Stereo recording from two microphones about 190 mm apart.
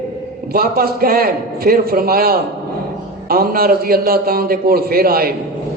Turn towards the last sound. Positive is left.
turn(degrees=-50)  # may be behind; listen again after turning